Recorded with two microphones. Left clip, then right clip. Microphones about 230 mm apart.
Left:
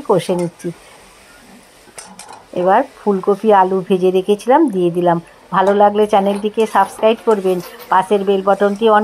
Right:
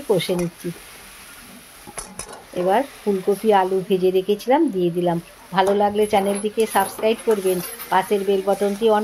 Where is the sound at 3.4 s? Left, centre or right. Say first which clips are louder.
Left 6 dB; centre.